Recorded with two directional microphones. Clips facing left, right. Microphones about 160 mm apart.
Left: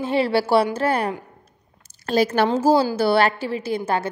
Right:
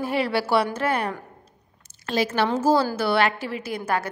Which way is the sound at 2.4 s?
30° left (ahead or behind).